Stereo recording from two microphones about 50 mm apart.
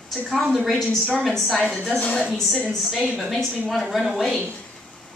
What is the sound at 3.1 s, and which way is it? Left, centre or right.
A woman's voice, centre.